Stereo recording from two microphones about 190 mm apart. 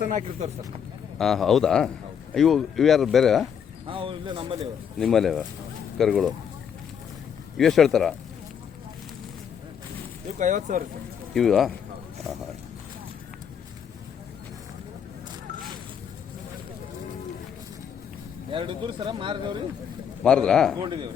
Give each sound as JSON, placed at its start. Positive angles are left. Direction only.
{"t": 0.1, "sound": "speech", "side_deg": -40}
{"t": 1.2, "sound": "speech", "side_deg": 0}
{"t": 3.8, "sound": "speech", "side_deg": -30}
{"t": 4.9, "sound": "speech", "side_deg": 0}
{"t": 7.5, "sound": "speech", "side_deg": 0}
{"t": 10.3, "sound": "speech", "side_deg": -40}
{"t": 11.3, "sound": "speech", "side_deg": 0}
{"t": 18.5, "sound": "speech", "side_deg": -25}
{"t": 20.2, "sound": "speech", "side_deg": 5}
{"t": 20.8, "sound": "speech", "side_deg": -25}